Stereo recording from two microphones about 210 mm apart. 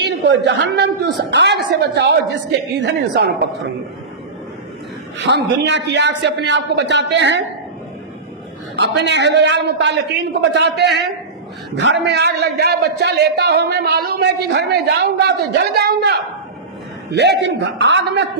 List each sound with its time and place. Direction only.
0.0 s a man's voice: 55° right (ahead or behind)
5.1 s a man's voice: 55° right (ahead or behind)
8.7 s a man's voice: 55° right (ahead or behind)